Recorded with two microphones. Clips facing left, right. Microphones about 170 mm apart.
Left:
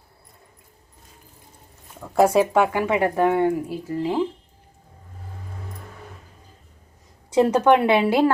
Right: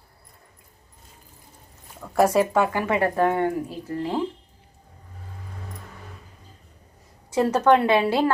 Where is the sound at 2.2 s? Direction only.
15° left (ahead or behind).